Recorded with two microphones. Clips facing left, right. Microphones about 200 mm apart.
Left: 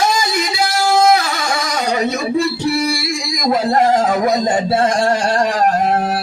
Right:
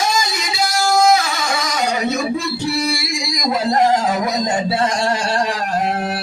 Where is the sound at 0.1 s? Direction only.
60° left (ahead or behind).